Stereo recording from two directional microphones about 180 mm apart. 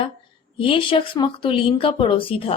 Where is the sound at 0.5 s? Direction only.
30° left (ahead or behind).